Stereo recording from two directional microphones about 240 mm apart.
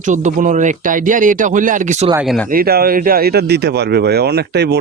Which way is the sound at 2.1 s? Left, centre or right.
Centre.